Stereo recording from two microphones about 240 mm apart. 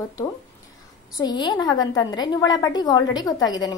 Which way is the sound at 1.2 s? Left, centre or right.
Centre.